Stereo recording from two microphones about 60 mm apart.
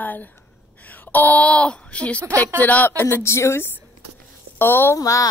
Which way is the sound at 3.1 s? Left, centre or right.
Left.